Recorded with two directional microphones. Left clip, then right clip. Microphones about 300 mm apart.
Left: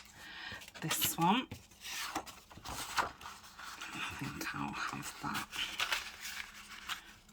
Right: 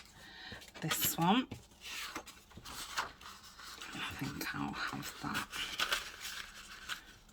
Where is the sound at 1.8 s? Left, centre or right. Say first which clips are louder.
Left 3 dB; centre.